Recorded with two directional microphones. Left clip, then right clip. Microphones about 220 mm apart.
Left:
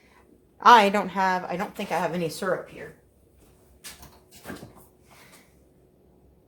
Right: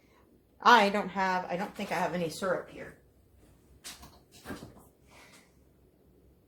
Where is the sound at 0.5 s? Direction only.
35° left (ahead or behind).